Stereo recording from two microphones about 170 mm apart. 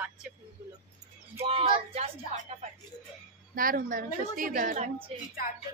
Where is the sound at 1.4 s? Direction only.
35° right (ahead or behind).